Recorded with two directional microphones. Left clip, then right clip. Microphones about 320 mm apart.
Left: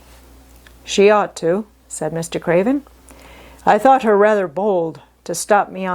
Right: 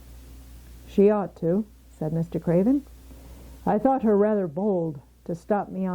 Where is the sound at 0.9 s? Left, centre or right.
Centre.